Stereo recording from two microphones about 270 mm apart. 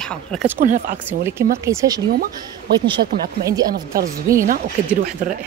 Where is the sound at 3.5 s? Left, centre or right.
Centre.